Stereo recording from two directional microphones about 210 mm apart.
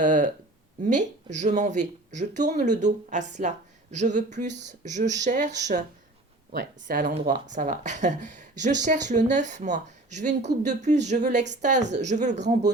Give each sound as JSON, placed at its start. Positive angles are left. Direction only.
{"t": 0.0, "sound": "speech", "side_deg": -35}